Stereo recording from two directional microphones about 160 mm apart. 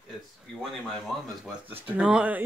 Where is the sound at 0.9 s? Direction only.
Centre (ahead or behind).